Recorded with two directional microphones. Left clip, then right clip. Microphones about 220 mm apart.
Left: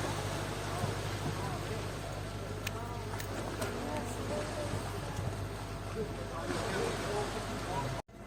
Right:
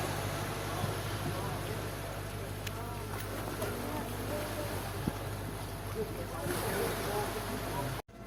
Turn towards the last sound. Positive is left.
turn(degrees=-35)  # may be behind; listen again after turning